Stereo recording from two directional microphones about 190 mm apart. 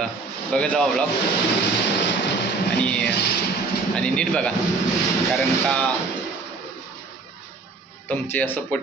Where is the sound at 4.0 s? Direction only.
5° left (ahead or behind).